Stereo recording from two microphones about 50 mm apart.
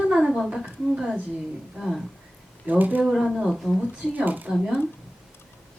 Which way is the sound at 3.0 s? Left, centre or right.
Centre.